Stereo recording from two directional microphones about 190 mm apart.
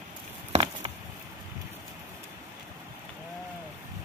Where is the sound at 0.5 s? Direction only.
30° right (ahead or behind).